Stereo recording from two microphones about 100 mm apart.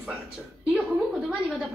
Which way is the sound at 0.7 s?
5° right (ahead or behind).